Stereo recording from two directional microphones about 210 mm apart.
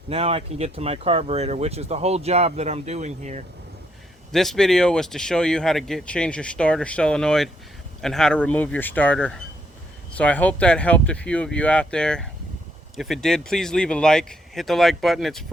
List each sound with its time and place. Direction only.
0.1 s speech: 30° right (ahead or behind)
4.3 s speech: centre (ahead or behind)